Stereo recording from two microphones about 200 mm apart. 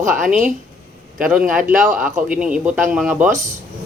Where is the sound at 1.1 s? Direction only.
5° right (ahead or behind).